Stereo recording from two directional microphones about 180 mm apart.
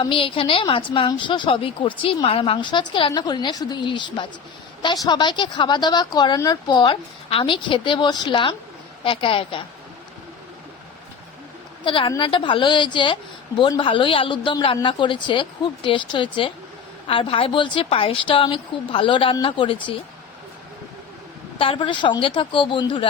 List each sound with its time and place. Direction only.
0.0 s a woman's voice: 30° left (ahead or behind)
11.9 s a woman's voice: 25° left (ahead or behind)
21.6 s a woman's voice: 30° left (ahead or behind)